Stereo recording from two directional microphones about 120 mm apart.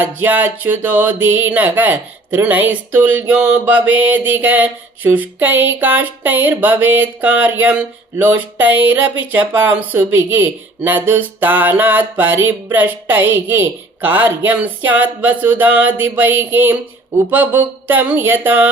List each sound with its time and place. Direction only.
0.0 s speech: 15° right (ahead or behind)